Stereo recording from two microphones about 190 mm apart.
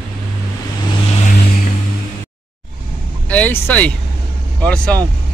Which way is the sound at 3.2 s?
5° left (ahead or behind).